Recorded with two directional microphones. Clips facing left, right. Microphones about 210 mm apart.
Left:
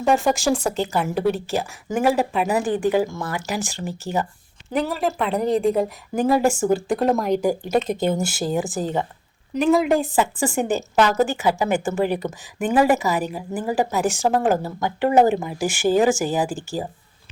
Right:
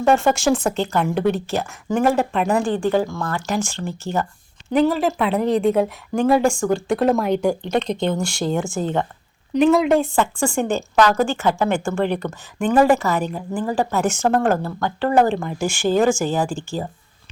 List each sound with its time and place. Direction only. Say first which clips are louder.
0.1 s speech: right 2 dB; centre (ahead or behind)
2.8 s speech: even; 20° left (ahead or behind)
3.2 s a woman's voice: right 3 dB; 5° left (ahead or behind)